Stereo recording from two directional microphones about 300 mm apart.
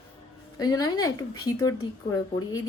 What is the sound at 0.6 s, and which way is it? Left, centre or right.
Speech, centre.